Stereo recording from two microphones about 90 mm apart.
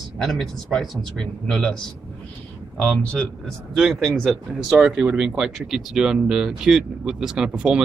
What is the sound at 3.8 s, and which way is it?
Speech, 5° right (ahead or behind).